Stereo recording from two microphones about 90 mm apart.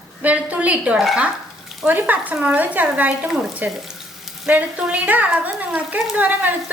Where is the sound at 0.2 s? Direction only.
15° right (ahead or behind).